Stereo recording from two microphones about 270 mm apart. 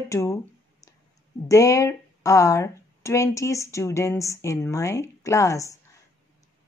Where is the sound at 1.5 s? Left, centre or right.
Centre.